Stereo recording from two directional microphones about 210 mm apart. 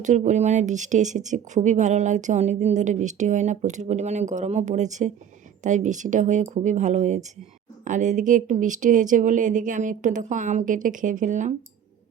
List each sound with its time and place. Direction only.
0.0 s speech: 35° right (ahead or behind)